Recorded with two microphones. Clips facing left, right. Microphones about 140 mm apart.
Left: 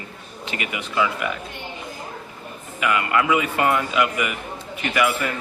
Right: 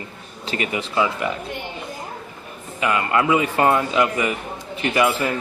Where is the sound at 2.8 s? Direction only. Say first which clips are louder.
Right 1 dB; 30° right (ahead or behind).